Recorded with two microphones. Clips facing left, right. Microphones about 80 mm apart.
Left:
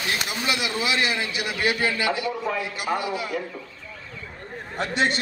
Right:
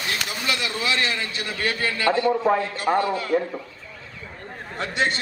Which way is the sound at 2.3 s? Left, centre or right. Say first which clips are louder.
Right 7 dB; right.